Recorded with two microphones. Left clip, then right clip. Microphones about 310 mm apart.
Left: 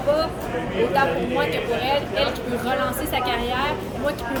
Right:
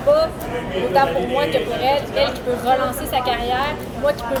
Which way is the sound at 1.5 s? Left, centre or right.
Centre.